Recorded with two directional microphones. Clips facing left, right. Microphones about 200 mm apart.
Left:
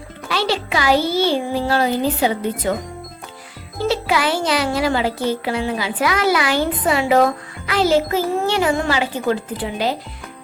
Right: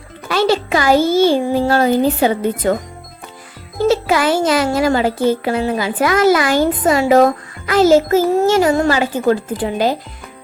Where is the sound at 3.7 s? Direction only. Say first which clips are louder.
Right 5 dB; 45° right (ahead or behind).